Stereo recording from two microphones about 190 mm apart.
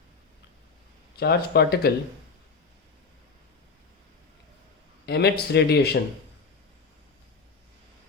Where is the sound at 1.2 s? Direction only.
55° left (ahead or behind).